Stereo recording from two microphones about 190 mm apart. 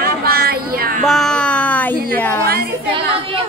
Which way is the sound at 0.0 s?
55° right (ahead or behind).